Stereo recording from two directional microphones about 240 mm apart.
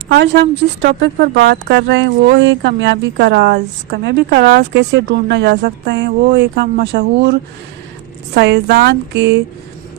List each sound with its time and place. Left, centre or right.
0.2 s speech: right
8.4 s speech: right